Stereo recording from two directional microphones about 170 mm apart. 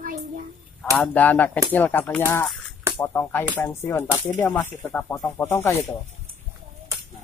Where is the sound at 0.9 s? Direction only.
10° left (ahead or behind).